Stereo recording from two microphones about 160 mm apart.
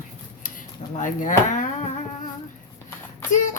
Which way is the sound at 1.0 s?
55° left (ahead or behind).